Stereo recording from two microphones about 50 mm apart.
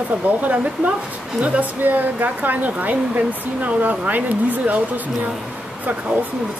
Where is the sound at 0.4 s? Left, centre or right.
Right.